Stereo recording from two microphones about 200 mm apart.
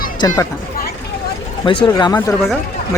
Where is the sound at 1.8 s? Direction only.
20° left (ahead or behind).